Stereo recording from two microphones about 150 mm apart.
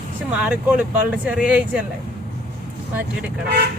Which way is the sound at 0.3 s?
10° right (ahead or behind).